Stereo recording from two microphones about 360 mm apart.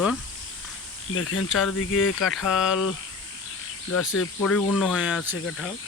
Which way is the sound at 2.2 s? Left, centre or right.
Centre.